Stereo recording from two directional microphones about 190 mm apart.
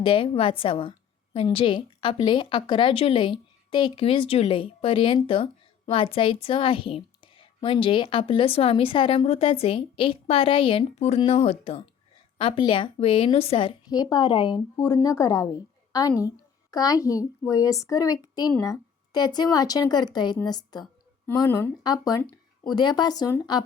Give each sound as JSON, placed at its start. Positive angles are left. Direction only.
{"t": 0.0, "sound": "a woman's voice", "side_deg": 30}